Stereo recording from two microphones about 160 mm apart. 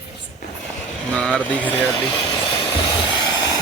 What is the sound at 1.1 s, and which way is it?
Speech, 5° left (ahead or behind).